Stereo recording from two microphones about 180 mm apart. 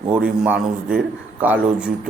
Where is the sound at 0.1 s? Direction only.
10° right (ahead or behind).